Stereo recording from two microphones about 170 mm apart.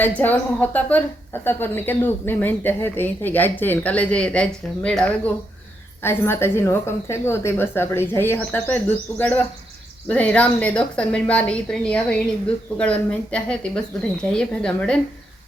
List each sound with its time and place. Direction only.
0.2 s a woman's voice: 10° left (ahead or behind)